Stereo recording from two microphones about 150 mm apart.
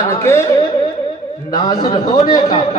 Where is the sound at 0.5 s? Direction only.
35° left (ahead or behind).